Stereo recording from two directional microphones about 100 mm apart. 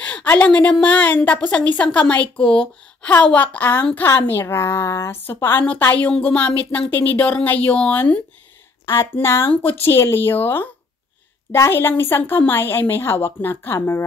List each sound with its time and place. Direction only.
0.0 s a woman's voice: 15° left (ahead or behind)
9.1 s speech: 25° left (ahead or behind)